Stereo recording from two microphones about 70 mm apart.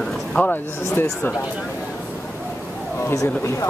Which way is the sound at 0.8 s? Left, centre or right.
Left.